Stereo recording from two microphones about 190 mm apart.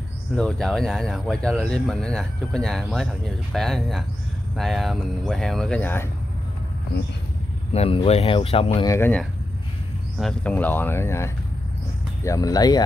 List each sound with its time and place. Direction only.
0.4 s speech: 5° left (ahead or behind)
7.7 s speech: 30° left (ahead or behind)
8.8 s speech: 15° left (ahead or behind)